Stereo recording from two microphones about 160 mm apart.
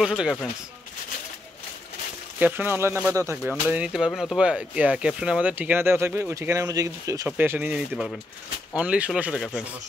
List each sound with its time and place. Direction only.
0.0 s speech: centre (ahead or behind)
2.3 s speech: 10° right (ahead or behind)
7.2 s speech: 10° right (ahead or behind)